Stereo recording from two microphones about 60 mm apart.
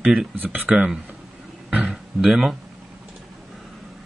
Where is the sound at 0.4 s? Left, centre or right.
Right.